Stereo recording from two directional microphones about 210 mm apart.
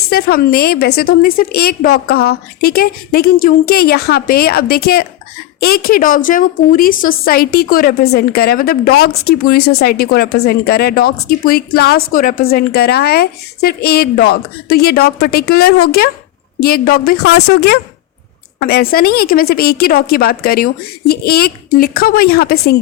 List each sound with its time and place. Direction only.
0.1 s a woman's voice: 45° left (ahead or behind)